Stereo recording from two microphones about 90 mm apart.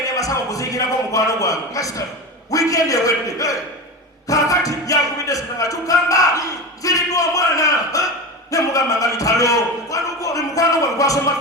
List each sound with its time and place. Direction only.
0.2 s speech: 40° left (ahead or behind)